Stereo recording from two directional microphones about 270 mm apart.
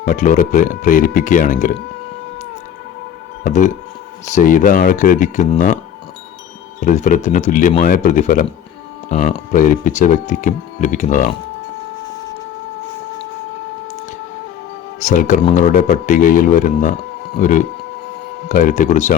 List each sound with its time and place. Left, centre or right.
0.0 s speech: left
3.4 s speech: left
15.0 s speech: left